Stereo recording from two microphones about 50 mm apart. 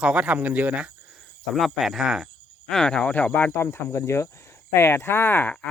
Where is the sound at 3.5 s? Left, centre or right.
Left.